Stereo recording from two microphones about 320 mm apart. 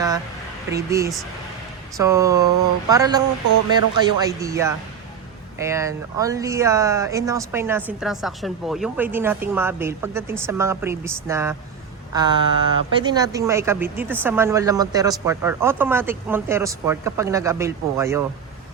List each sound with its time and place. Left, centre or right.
0.7 s speech: centre